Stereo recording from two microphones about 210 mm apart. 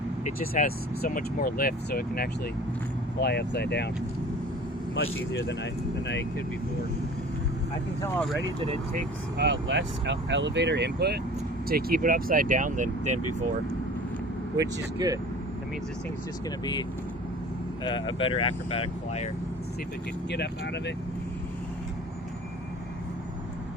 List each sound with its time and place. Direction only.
0.3 s speech: 40° left (ahead or behind)
5.3 s speech: 55° left (ahead or behind)
9.4 s speech: 55° right (ahead or behind); by 13.1 s 35° right (ahead or behind)
14.6 s speech: 15° right (ahead or behind)
17.8 s speech: 20° left (ahead or behind)
20.3 s speech: 55° left (ahead or behind)